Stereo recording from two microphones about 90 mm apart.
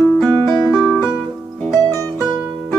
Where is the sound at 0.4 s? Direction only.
15° left (ahead or behind).